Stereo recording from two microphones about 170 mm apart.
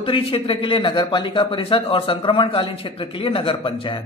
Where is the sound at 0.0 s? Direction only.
30° left (ahead or behind).